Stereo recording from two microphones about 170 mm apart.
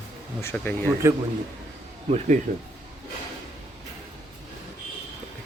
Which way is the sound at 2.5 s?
45° right (ahead or behind).